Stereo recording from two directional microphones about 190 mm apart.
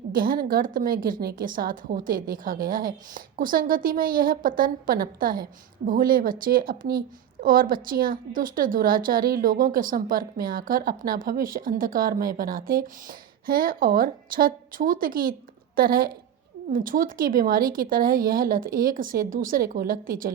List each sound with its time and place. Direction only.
0.1 s a woman's voice: 50° right (ahead or behind)